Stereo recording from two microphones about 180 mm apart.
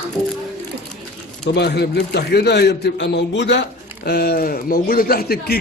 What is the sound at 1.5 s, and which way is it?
A man's voice, 65° left (ahead or behind).